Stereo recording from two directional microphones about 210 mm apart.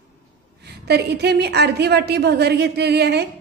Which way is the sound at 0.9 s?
50° right (ahead or behind).